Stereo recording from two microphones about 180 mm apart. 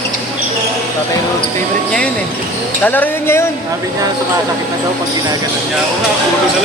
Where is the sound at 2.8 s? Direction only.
10° left (ahead or behind).